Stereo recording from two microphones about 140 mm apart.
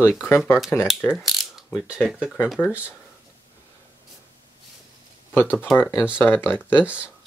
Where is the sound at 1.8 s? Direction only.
5° right (ahead or behind).